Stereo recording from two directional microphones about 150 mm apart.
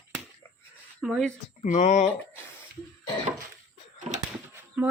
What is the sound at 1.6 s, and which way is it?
Speech, 55° left (ahead or behind).